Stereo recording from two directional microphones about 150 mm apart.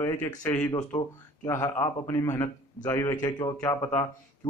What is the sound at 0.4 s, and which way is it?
Speech, 10° left (ahead or behind).